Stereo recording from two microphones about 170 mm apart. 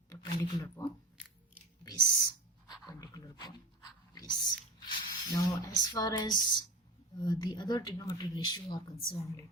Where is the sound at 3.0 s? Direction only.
25° left (ahead or behind).